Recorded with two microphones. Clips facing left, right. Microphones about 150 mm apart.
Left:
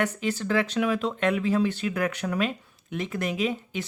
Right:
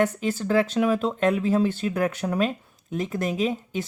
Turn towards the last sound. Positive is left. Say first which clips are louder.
# right 2 dB
turn(degrees=-40)  # may be behind; listen again after turning